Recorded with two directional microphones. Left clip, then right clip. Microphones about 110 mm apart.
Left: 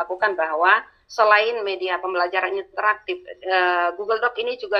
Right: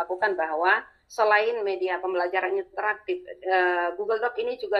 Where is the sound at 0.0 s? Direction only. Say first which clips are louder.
Left 4 dB; 15° right (ahead or behind).